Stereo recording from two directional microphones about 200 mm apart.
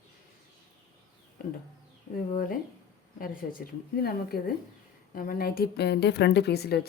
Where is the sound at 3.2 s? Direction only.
50° left (ahead or behind).